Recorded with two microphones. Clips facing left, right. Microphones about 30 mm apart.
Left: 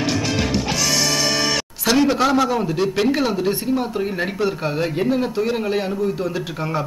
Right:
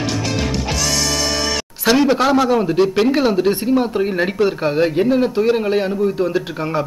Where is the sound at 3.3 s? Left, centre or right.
Right.